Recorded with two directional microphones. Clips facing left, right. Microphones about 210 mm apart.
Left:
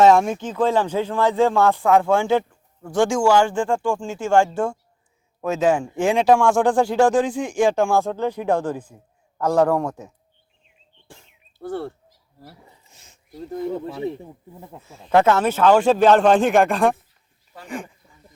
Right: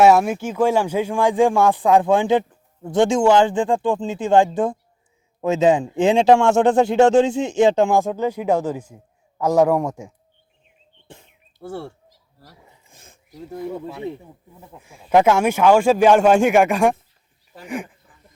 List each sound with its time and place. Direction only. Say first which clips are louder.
0.0 s speech: right 1 dB; 10° right (ahead or behind)
10.9 s chirp: right 3 dB; 20° right (ahead or behind)
11.6 s speech: left 3 dB; 10° right (ahead or behind)
12.9 s a sound: right 4 dB; 50° right (ahead or behind)
13.5 s speech: left 2 dB; 10° right (ahead or behind)